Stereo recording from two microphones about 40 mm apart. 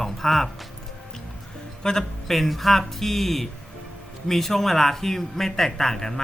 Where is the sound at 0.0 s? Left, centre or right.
Centre.